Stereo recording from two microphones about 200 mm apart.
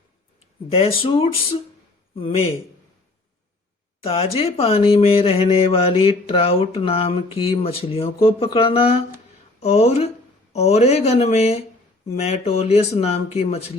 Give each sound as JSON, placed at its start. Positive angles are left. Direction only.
{"t": 0.7, "sound": "speech", "side_deg": 30}
{"t": 4.0, "sound": "speech", "side_deg": 30}